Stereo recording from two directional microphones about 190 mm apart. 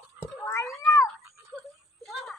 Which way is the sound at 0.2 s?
15° left (ahead or behind).